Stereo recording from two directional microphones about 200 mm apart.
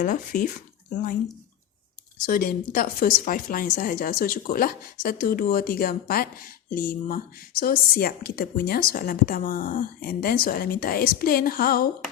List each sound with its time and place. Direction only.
0.0 s speech: 40° left (ahead or behind)
2.2 s a woman's voice: 45° left (ahead or behind)